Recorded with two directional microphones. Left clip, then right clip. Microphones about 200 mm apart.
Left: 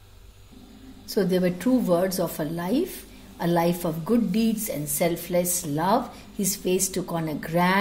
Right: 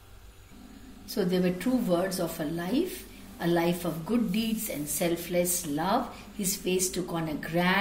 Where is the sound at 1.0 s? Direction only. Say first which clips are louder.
Left 5 dB; 55° left (ahead or behind).